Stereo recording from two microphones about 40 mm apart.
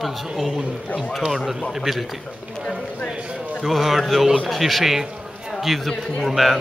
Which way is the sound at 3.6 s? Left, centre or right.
Centre.